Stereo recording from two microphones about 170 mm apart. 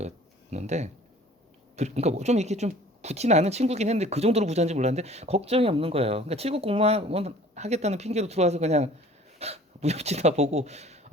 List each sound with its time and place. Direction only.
0.5 s speech: 40° right (ahead or behind)